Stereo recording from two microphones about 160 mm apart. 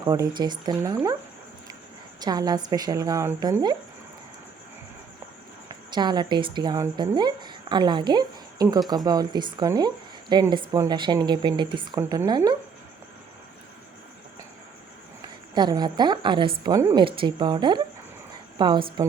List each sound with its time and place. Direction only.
0.0 s a woman's voice: 25° right (ahead or behind)
2.2 s a woman's voice: 25° right (ahead or behind)
5.9 s a woman's voice: 25° right (ahead or behind)
15.5 s a woman's voice: 25° right (ahead or behind)